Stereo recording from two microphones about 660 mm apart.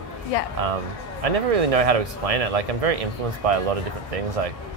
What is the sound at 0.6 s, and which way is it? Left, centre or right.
Speech, right.